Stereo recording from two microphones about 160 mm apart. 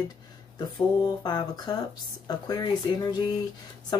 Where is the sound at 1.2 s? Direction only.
25° left (ahead or behind).